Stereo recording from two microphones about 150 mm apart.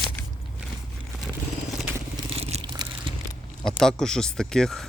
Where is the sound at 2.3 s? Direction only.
40° right (ahead or behind).